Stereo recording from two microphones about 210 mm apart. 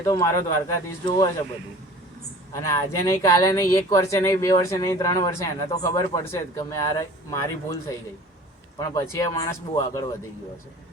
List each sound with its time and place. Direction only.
0.0 s speech: 15° left (ahead or behind)
2.5 s speech: 15° left (ahead or behind)
9.1 s speech: 15° left (ahead or behind)